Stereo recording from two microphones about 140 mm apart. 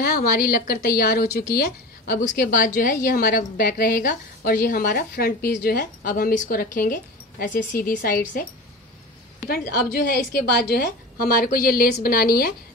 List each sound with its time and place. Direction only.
0.0 s a woman's voice: 90° left
2.2 s a woman's voice: 75° left (ahead or behind)
9.5 s a woman's voice: 90° left